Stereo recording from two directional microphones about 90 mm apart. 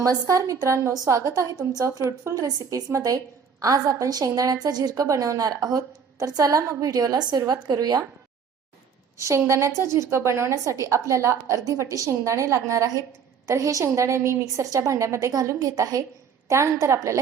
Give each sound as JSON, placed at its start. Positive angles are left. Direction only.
{"t": 0.0, "sound": "a woman's voice", "side_deg": -40}
{"t": 9.1, "sound": "a woman's voice", "side_deg": -35}